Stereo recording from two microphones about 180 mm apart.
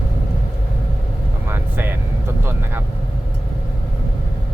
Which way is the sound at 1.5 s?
10° right (ahead or behind).